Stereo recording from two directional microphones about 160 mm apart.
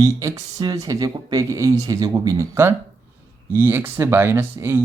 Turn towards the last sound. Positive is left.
turn(degrees=-15)  # may be behind; listen again after turning